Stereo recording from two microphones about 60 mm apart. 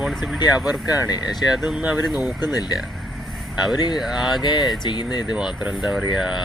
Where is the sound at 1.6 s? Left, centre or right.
Centre.